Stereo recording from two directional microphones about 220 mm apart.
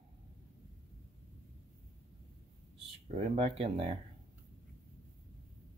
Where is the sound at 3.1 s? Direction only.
25° right (ahead or behind).